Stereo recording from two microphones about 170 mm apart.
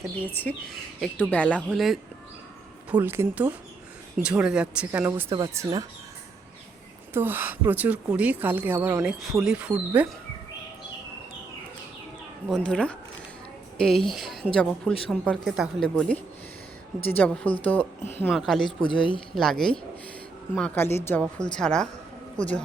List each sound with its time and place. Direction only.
0.3 s speech: 5° left (ahead or behind)
2.9 s speech: 15° right (ahead or behind)
7.1 s a woman's voice: 15° right (ahead or behind)
12.5 s a woman's voice: 5° left (ahead or behind)